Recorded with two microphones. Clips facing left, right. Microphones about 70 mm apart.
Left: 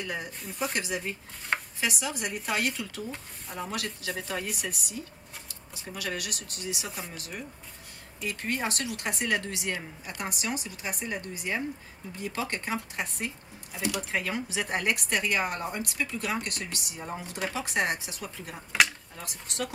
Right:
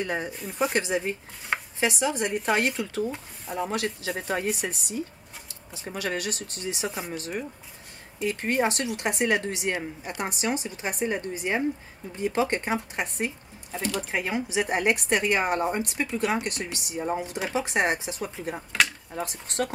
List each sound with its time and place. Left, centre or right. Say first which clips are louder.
0.0 s speech: right 6 dB; right
0.3 s speech: right 5 dB; centre
0.7 s speech: right 6 dB; right